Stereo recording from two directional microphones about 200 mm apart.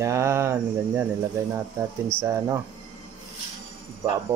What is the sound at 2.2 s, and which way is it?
Speech, 15° right (ahead or behind).